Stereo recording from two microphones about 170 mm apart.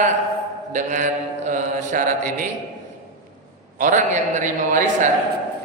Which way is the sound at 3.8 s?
50° right (ahead or behind).